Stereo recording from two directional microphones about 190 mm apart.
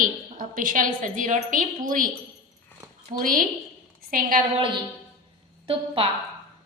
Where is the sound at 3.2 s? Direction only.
45° right (ahead or behind).